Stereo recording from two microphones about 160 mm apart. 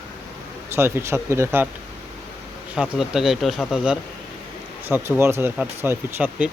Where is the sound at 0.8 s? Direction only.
15° right (ahead or behind).